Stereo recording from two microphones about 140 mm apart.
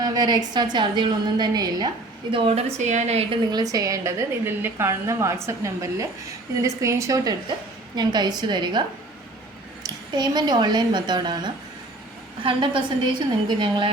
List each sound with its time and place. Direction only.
0.0 s a woman's voice: 30° right (ahead or behind)
2.3 s a woman's voice: 45° right (ahead or behind)
3.5 s a woman's voice: 25° right (ahead or behind)
9.8 s a woman's voice: 30° right (ahead or behind)